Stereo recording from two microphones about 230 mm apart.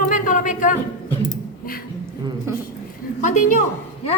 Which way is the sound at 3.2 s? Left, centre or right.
Left.